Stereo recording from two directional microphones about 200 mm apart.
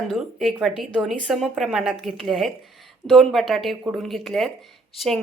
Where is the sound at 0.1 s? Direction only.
Centre (ahead or behind).